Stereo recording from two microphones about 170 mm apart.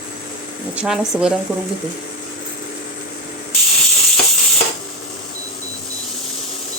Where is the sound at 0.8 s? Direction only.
5° right (ahead or behind).